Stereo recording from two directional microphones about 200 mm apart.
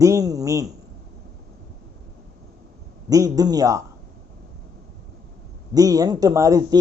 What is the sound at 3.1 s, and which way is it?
Speech, 15° right (ahead or behind).